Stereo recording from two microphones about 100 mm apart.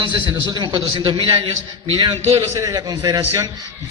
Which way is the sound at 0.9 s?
60° right (ahead or behind).